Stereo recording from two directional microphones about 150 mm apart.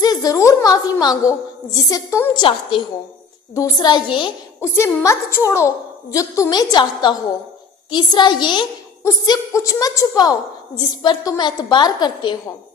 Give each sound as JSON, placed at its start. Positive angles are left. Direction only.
{"t": 0.0, "sound": "a sound", "side_deg": 25}
{"t": 1.9, "sound": "a woman's voice", "side_deg": 20}
{"t": 2.3, "sound": "a woman's voice", "side_deg": 30}
{"t": 4.6, "sound": "a woman's voice", "side_deg": 15}